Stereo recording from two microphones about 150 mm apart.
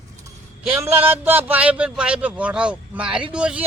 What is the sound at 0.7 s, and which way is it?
Speech, 10° right (ahead or behind).